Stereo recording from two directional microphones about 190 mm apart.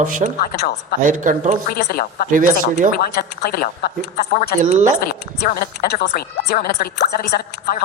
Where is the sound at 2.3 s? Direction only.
45° right (ahead or behind).